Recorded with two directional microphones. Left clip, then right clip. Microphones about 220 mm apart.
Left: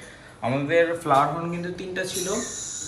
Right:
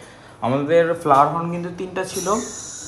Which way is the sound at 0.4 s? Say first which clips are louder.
Right 4 dB; 50° right (ahead or behind).